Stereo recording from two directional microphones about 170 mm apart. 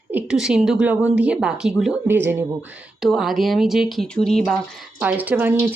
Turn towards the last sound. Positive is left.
turn(degrees=-10)  # may be behind; listen again after turning